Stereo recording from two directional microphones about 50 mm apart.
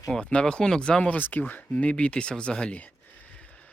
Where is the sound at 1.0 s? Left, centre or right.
Left.